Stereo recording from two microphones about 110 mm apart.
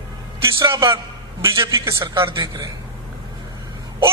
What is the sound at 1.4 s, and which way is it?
Speech, 25° right (ahead or behind).